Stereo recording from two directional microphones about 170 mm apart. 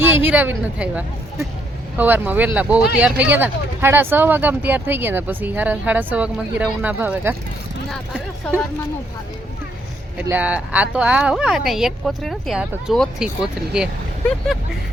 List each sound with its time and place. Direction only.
0.0 s speech: 10° right (ahead or behind)
7.9 s speech: centre (ahead or behind)
10.2 s speech: 10° right (ahead or behind)